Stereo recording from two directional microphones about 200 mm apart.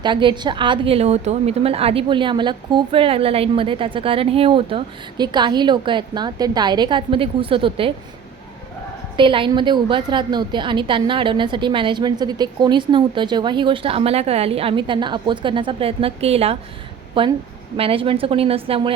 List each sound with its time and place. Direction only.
0.0 s a woman's voice: 25° right (ahead or behind)
9.1 s a woman's voice: 25° right (ahead or behind)